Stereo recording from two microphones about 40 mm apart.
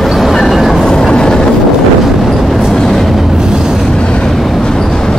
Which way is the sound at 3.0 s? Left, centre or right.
Centre.